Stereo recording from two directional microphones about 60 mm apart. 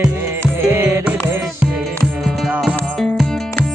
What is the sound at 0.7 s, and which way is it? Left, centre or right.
Music, right.